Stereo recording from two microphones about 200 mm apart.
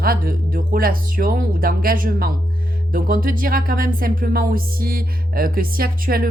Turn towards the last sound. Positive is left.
turn(degrees=-45)  # may be behind; listen again after turning